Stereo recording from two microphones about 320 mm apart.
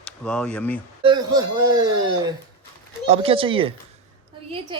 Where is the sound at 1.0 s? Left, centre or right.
Centre.